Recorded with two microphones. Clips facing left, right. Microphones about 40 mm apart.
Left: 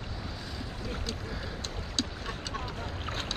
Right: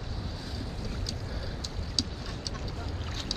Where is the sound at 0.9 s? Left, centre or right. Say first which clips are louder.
Left 2 dB; left.